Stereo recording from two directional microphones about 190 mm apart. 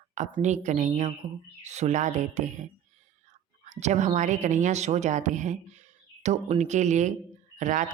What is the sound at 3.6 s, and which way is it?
A woman's voice, 40° right (ahead or behind).